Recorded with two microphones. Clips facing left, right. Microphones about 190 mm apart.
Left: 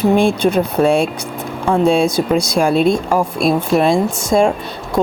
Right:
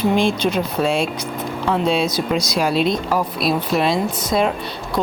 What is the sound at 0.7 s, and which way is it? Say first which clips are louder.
Speech: left 6 dB; 55° left (ahead or behind).